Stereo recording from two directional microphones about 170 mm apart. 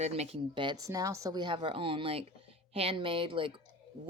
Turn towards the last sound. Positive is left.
turn(degrees=-30)  # may be behind; listen again after turning